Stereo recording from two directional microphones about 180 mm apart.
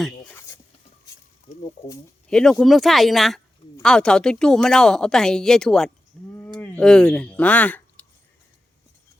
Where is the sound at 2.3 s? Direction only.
5° left (ahead or behind).